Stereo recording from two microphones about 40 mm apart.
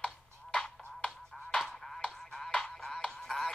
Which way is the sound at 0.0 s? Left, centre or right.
Centre.